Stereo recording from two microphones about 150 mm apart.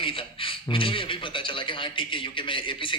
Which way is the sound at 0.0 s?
35° left (ahead or behind).